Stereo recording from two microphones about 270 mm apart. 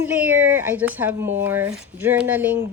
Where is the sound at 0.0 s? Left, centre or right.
Centre.